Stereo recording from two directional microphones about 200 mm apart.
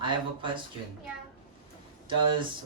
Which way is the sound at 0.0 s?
25° right (ahead or behind).